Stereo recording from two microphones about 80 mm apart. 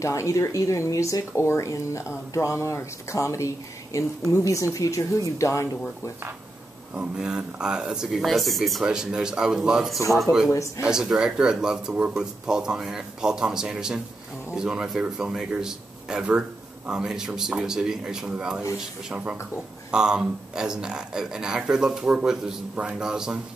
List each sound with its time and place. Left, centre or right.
0.0 s a woman's voice: left
7.2 s speech: centre